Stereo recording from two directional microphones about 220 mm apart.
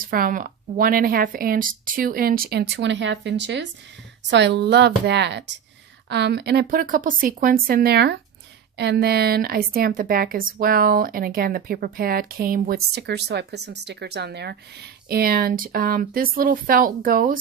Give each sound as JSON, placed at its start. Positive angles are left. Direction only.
{"t": 0.0, "sound": "a woman's voice", "side_deg": -40}